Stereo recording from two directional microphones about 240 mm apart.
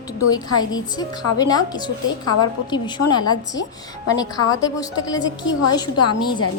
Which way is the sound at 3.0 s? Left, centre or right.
Left.